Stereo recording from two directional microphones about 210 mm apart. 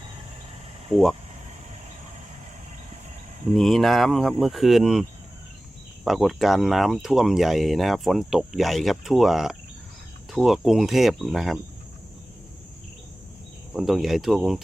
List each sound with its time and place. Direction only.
3.6 s speech: centre (ahead or behind)
6.1 s speech: centre (ahead or behind)
13.7 s speech: centre (ahead or behind)